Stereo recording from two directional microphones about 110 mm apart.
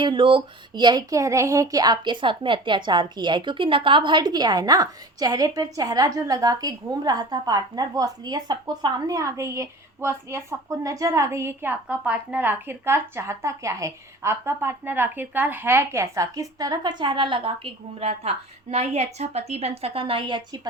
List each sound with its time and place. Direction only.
0.0 s speech: 50° right (ahead or behind)
1.1 s a woman's voice: 30° right (ahead or behind); by 20.6 s 45° right (ahead or behind)